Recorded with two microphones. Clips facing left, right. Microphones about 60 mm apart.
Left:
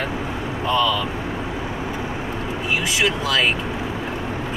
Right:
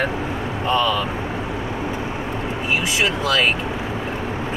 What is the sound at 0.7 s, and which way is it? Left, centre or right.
Speech, right.